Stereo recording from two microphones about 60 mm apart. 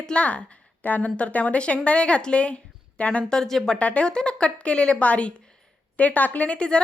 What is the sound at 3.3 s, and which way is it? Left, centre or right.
A woman's voice, centre.